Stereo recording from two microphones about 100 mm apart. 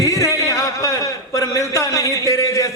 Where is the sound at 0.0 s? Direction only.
30° left (ahead or behind).